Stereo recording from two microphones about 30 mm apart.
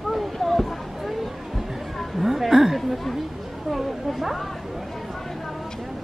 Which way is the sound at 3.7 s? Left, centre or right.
Centre.